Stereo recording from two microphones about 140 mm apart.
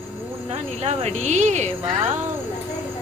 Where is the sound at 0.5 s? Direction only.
55° right (ahead or behind).